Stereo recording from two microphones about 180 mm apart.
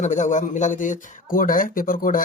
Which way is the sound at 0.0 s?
40° left (ahead or behind).